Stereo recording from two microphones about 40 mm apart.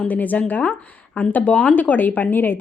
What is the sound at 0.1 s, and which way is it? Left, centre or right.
Speech, left.